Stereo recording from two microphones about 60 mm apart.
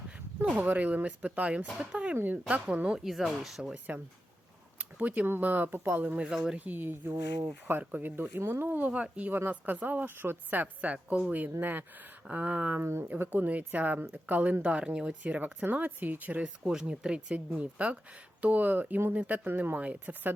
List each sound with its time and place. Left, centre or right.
0.5 s speech: right
2.1 s speech: right
2.9 s speech: centre
4.8 s speech: right
6.2 s speech: centre
6.7 s a woman's voice: right
8.9 s speech: right
9.3 s a woman's voice: right
12.8 s speech: right
13.3 s speech: right
16.4 s speech: centre